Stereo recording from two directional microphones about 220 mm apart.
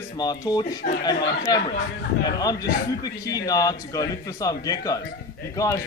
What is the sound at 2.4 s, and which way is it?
A man's voice, 15° left (ahead or behind).